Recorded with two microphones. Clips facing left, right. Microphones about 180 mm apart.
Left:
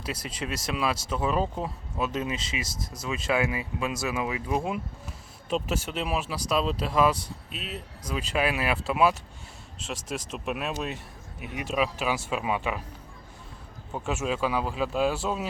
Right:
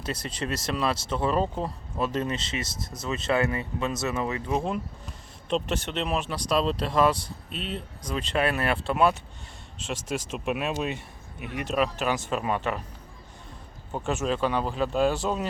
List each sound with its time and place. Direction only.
0.1 s speech: 5° left (ahead or behind)
2.7 s speech: 25° right (ahead or behind)
3.1 s speech: 10° left (ahead or behind)
13.9 s speech: 5° left (ahead or behind)